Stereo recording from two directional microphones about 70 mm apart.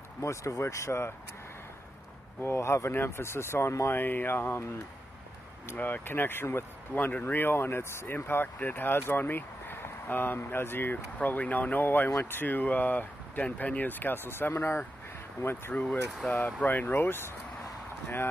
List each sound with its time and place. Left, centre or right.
0.2 s speech: left
2.4 s speech: left
5.8 s speech: left
15.7 s speech: centre